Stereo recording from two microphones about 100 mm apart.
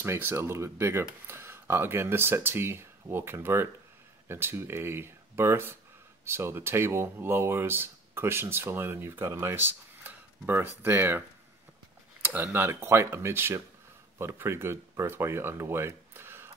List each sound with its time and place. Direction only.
0.0 s speech: 25° right (ahead or behind)
12.5 s speech: 25° right (ahead or behind)